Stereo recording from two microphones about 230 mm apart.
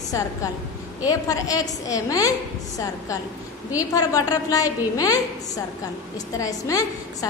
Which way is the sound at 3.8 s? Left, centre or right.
Centre.